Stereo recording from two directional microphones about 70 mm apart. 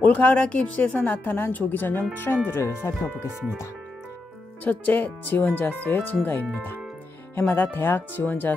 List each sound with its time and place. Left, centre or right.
0.0 s a woman's voice: centre
4.6 s a woman's voice: left
7.3 s a woman's voice: left